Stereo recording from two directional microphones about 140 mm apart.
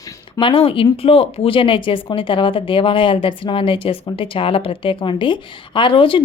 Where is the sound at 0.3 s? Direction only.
40° left (ahead or behind).